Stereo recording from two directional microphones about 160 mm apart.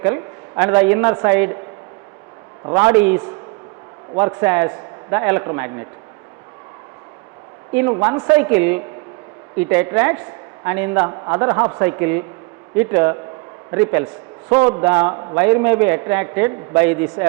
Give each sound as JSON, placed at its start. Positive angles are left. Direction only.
{"t": 0.0, "sound": "a sound", "side_deg": -15}
{"t": 0.8, "sound": "a man's voice", "side_deg": -15}
{"t": 2.7, "sound": "a man's voice", "side_deg": -10}
{"t": 7.7, "sound": "a man's voice", "side_deg": -10}
{"t": 15.1, "sound": "a man's voice", "side_deg": -25}
{"t": 15.4, "sound": "a man's voice", "side_deg": -15}